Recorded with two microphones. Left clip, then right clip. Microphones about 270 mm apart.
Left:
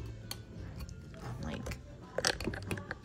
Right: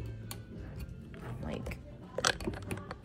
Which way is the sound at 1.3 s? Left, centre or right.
Centre.